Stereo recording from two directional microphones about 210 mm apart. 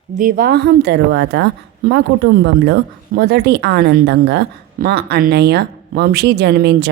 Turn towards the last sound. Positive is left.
turn(degrees=-50)  # may be behind; listen again after turning